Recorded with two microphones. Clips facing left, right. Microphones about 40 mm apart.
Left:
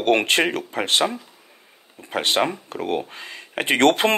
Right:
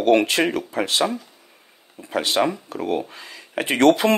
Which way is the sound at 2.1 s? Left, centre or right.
Left.